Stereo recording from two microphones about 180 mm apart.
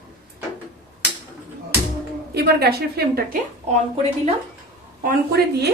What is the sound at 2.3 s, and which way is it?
Speech, 60° right (ahead or behind).